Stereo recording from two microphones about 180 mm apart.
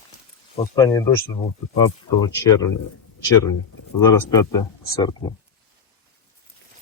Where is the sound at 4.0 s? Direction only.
20° left (ahead or behind).